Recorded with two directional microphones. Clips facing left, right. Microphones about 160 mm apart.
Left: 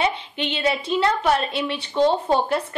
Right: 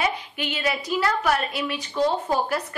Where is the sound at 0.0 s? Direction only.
25° left (ahead or behind).